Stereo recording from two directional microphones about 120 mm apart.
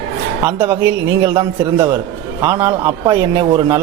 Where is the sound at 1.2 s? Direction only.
30° right (ahead or behind).